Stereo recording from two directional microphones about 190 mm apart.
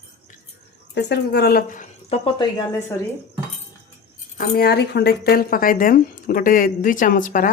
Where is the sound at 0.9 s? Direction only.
60° left (ahead or behind); by 2.1 s 40° left (ahead or behind).